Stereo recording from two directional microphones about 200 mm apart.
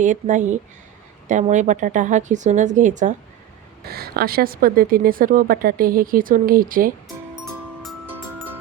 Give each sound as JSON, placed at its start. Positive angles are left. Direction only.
{"t": 0.0, "sound": "speech", "side_deg": -40}
{"t": 3.8, "sound": "a woman's voice", "side_deg": -50}
{"t": 7.8, "sound": "music", "side_deg": 0}